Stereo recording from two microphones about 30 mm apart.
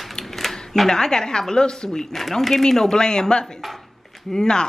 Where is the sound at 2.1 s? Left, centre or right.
Centre.